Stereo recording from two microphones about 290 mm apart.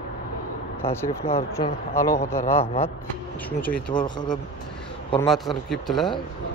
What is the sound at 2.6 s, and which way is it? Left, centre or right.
Speech, centre.